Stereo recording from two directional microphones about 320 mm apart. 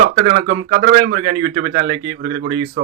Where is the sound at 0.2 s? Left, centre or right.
Right.